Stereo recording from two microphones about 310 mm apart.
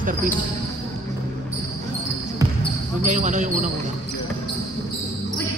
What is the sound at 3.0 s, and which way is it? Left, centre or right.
Speech, right.